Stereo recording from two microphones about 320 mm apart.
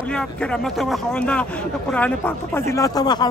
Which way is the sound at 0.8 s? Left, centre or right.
Centre.